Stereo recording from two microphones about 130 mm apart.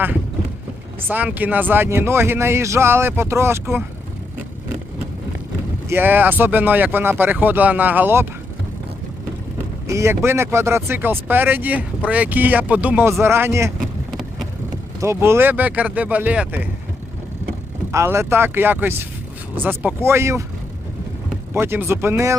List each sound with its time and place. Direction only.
1.1 s speech: 15° right (ahead or behind)
5.9 s speech: 15° right (ahead or behind)
9.8 s speech: 25° right (ahead or behind)
14.1 s vehicle: centre (ahead or behind)
15.0 s speech: 20° right (ahead or behind)
17.9 s speech: 20° right (ahead or behind)
21.5 s speech: 15° right (ahead or behind)